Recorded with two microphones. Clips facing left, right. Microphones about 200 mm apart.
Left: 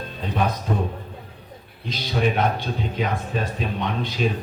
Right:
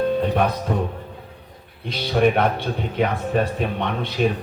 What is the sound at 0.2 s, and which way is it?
Speech, 60° right (ahead or behind).